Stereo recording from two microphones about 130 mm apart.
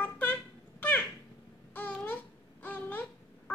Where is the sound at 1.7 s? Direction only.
10° left (ahead or behind).